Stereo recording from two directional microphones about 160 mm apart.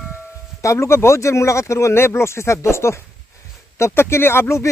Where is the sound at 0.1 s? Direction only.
15° left (ahead or behind).